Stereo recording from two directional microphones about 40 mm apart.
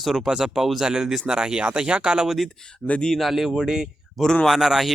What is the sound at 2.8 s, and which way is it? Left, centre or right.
Speech, left.